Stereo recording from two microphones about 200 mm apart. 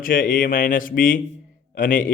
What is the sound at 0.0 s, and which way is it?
A man's voice, 45° left (ahead or behind).